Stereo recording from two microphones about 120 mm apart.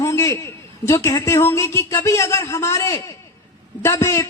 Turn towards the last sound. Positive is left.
turn(degrees=25)  # may be behind; listen again after turning